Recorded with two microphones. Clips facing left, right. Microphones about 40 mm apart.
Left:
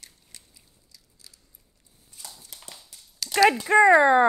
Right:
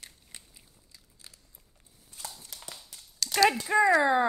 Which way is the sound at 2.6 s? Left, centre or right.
Centre.